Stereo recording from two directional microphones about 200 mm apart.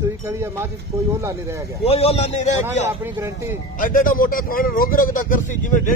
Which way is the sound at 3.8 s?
45° left (ahead or behind).